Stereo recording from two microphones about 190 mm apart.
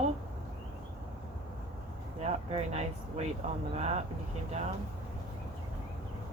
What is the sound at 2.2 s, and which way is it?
Speech, 35° right (ahead or behind).